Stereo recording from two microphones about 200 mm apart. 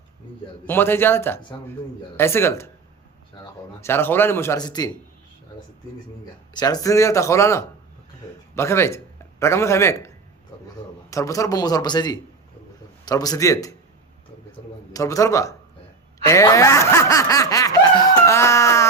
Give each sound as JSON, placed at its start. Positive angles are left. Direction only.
{"t": 0.6, "sound": "a man's voice", "side_deg": 10}
{"t": 6.5, "sound": "a man's voice", "side_deg": 20}
{"t": 14.9, "sound": "a man's voice", "side_deg": 15}
{"t": 16.2, "sound": "snicker", "side_deg": 15}